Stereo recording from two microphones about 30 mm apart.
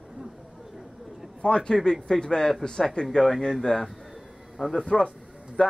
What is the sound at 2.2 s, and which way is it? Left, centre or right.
Speech, left.